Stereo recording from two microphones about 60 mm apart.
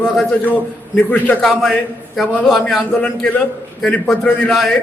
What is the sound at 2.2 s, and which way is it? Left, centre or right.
Speech, left.